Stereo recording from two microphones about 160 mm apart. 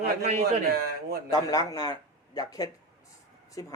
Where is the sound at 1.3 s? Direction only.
20° left (ahead or behind).